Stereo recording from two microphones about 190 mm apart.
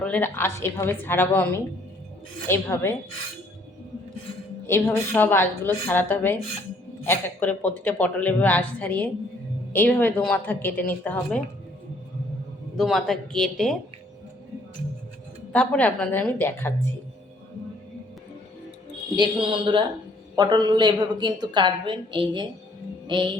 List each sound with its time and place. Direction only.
0.0 s speech: 10° left (ahead or behind)
2.5 s speech: 15° left (ahead or behind)
4.6 s speech: 10° left (ahead or behind)
12.7 s speech: centre (ahead or behind)
15.5 s speech: 5° left (ahead or behind)
19.1 s a woman's voice: 25° right (ahead or behind)